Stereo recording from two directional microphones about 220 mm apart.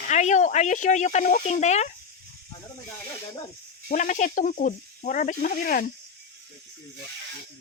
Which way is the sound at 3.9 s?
35° left (ahead or behind).